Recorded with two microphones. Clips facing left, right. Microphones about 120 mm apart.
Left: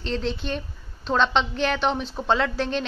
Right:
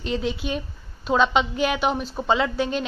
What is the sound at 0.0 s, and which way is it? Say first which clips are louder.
A woman's voice: right 1 dB; 10° right (ahead or behind).